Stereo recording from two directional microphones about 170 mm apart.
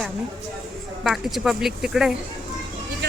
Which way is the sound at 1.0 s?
Centre (ahead or behind).